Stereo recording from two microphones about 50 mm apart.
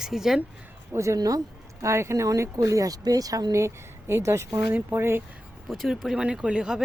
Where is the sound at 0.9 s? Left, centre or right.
Right.